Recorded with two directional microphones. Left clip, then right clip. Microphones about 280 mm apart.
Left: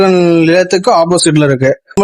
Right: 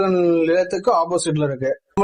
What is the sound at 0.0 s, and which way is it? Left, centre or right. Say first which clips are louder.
A man's voice: left 9 dB; left.